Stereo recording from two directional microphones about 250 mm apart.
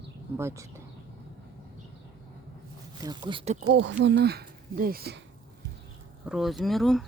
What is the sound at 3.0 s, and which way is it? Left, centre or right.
Speech, centre.